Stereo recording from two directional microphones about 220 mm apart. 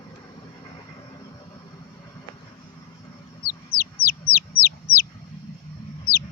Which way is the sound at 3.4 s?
45° left (ahead or behind).